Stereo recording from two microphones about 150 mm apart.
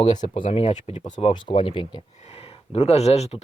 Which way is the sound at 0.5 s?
50° left (ahead or behind).